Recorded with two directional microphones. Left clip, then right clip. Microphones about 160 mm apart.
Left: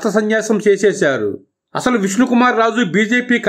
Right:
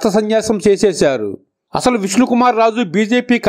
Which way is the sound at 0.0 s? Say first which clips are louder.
Right 2 dB; 40° right (ahead or behind).